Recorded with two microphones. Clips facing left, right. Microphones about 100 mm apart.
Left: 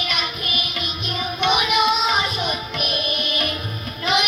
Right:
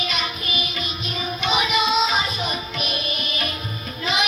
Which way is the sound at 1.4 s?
65° left (ahead or behind).